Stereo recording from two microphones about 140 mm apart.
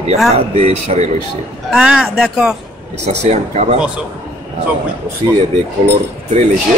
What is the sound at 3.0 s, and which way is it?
Speech, 50° right (ahead or behind).